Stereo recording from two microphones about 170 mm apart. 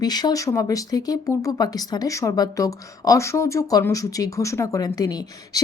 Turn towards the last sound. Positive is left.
turn(degrees=20)  # may be behind; listen again after turning